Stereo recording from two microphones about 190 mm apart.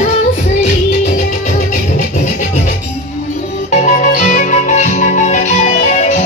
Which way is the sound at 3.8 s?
40° left (ahead or behind).